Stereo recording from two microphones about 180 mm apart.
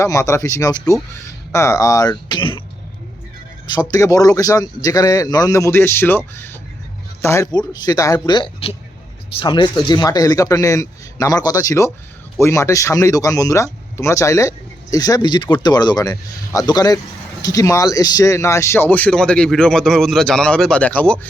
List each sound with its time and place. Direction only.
0.0 s speech: 15° left (ahead or behind)
3.9 s speech: 20° left (ahead or behind)